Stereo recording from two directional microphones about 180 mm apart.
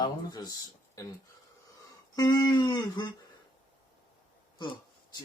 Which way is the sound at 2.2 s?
20° left (ahead or behind).